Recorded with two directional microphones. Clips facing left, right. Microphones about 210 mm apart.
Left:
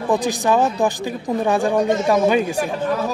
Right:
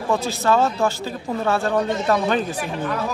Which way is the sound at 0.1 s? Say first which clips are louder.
Left 2 dB; 15° left (ahead or behind).